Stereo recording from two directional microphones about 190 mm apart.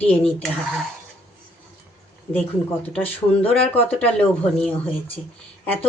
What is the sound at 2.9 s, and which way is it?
A woman's voice, 10° left (ahead or behind).